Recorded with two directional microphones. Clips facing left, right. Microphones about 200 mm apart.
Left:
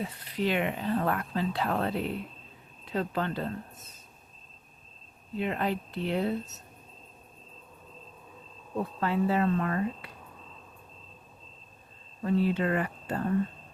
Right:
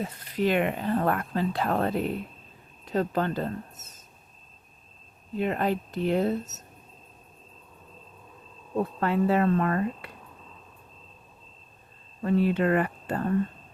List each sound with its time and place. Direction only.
0.0 s speech: 45° right (ahead or behind)
5.4 s speech: 45° right (ahead or behind)
9.0 s speech: 55° right (ahead or behind)
12.2 s speech: 60° right (ahead or behind)